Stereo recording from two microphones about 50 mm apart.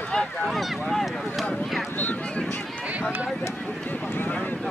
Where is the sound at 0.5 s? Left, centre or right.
Centre.